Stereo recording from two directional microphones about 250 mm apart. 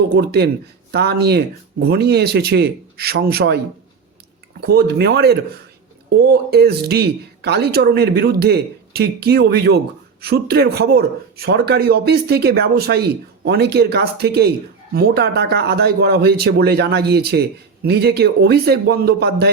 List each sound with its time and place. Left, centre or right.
0.2 s speech: right
4.6 s speech: right